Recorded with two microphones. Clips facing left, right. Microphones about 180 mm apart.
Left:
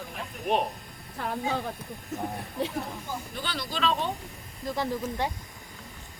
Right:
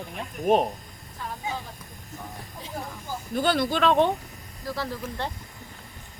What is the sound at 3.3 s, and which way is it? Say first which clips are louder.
Speech: right 14 dB; 50° right (ahead or behind).